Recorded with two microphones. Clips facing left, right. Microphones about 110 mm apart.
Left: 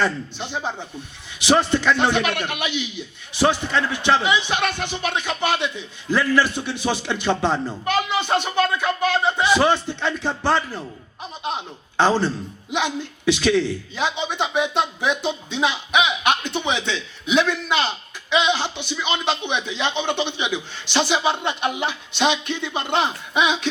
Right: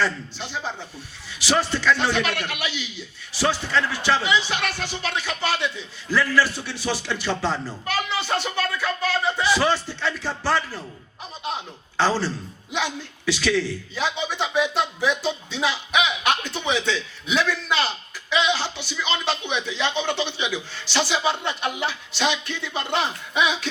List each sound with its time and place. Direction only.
0.0 s a man's voice: 20° left (ahead or behind)